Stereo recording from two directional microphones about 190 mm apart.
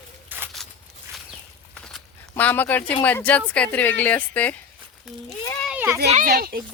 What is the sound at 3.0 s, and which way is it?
A woman's voice, 10° left (ahead or behind).